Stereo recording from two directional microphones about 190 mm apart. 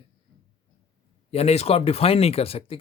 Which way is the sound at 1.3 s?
35° left (ahead or behind).